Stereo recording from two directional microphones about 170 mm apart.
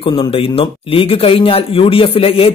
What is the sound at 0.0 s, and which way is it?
Speech, 30° left (ahead or behind).